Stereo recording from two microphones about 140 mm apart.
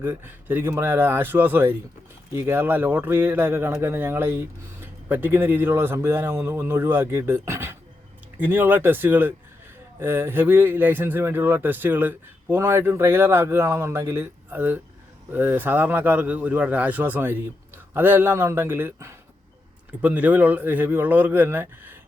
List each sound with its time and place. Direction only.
0.0 s speech: 15° right (ahead or behind)